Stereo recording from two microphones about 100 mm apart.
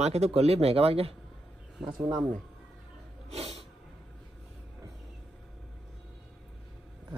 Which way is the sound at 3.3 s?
90° right.